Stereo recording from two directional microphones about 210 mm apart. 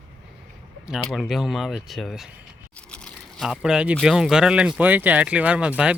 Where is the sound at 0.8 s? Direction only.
Centre (ahead or behind).